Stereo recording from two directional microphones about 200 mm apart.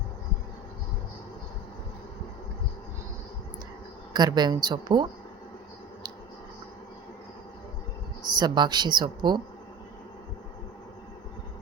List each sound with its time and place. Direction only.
4.1 s speech: 20° right (ahead or behind)
8.2 s speech: 20° right (ahead or behind)